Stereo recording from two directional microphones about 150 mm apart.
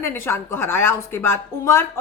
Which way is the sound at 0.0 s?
15° left (ahead or behind).